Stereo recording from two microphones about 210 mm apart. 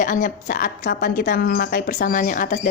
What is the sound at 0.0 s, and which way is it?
A woman's voice, 40° left (ahead or behind).